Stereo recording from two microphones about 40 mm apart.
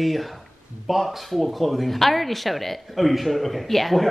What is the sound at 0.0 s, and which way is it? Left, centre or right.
Speech, centre.